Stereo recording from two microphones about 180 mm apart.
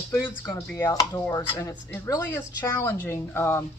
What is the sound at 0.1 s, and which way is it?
Speech, 20° left (ahead or behind).